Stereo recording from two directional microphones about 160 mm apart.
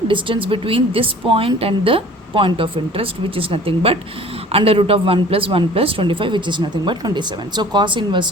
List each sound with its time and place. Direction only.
0.1 s a woman's voice: 30° right (ahead or behind)